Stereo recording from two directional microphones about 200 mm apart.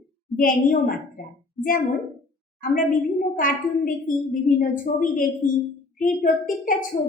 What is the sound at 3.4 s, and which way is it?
A woman's voice, 45° left (ahead or behind).